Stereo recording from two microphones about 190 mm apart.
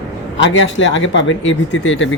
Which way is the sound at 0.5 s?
80° left.